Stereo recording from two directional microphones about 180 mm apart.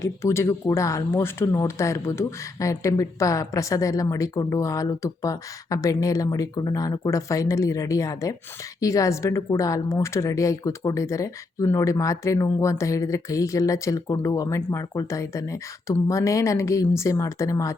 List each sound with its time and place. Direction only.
0.0 s a woman's voice: 15° left (ahead or behind)